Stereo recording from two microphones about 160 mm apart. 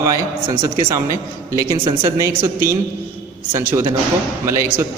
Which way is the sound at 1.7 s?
30° right (ahead or behind).